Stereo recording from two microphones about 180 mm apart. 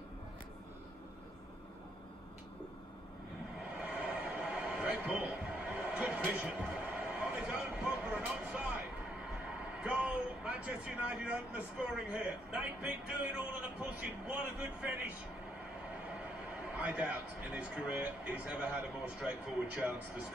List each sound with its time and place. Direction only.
3.8 s a sound: 5° right (ahead or behind)
9.8 s a man's voice: 5° right (ahead or behind)
16.7 s a man's voice: 5° right (ahead or behind)